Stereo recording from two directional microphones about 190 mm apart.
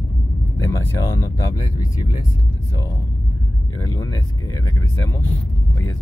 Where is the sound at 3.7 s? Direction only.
15° left (ahead or behind).